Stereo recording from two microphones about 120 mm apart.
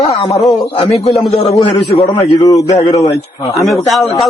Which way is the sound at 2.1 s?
30° left (ahead or behind).